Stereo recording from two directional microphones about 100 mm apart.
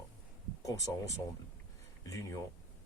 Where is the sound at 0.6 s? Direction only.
35° left (ahead or behind).